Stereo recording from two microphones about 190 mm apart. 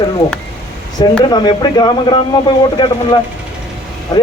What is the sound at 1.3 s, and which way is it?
Speech, 20° left (ahead or behind).